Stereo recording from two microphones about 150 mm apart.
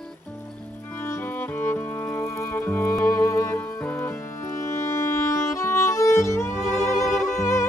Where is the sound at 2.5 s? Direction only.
15° left (ahead or behind).